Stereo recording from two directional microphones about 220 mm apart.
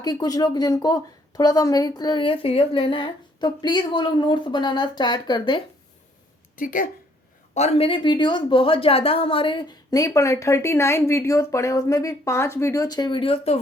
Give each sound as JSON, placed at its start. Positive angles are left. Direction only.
{"t": 0.0, "sound": "a woman's voice", "side_deg": 15}
{"t": 6.6, "sound": "a woman's voice", "side_deg": 40}